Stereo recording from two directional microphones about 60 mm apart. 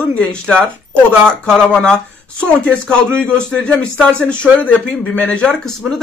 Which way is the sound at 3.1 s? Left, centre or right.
Centre.